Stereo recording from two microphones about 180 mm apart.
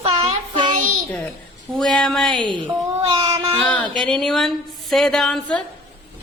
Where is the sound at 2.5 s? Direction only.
25° right (ahead or behind).